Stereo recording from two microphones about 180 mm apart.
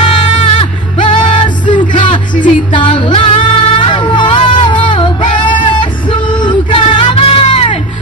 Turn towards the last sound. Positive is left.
turn(degrees=30)  # may be behind; listen again after turning